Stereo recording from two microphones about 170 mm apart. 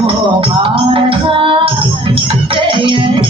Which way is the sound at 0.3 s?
30° right (ahead or behind).